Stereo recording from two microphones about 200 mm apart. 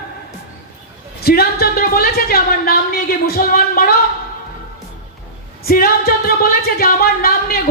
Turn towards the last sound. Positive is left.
turn(degrees=50)  # may be behind; listen again after turning